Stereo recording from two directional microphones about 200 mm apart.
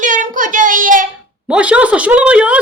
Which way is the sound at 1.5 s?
5° right (ahead or behind).